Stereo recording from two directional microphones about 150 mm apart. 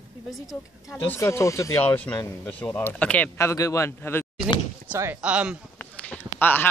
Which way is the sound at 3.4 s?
20° left (ahead or behind).